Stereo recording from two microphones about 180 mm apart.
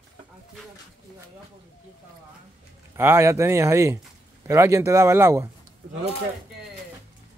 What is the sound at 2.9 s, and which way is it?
Speech, 15° right (ahead or behind).